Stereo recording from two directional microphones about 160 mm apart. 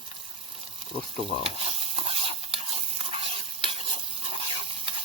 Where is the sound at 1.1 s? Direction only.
35° right (ahead or behind).